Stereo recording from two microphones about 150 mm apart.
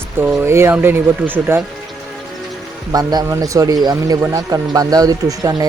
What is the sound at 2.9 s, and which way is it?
Speech, 25° right (ahead or behind).